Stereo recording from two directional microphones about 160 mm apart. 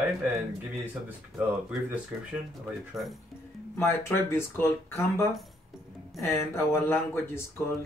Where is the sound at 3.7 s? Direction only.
15° left (ahead or behind).